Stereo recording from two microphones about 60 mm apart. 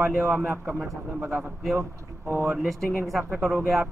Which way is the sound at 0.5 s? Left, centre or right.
Right.